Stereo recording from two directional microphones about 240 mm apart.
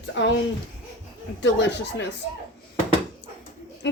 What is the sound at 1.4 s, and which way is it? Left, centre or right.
Speech, left.